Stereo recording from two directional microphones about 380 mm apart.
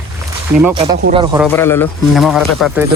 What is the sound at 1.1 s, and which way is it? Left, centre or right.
Speech, centre.